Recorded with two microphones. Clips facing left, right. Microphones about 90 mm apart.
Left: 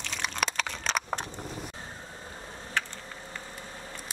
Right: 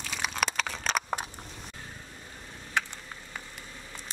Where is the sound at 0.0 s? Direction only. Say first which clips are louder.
Right 1 dB; 5° right (ahead or behind).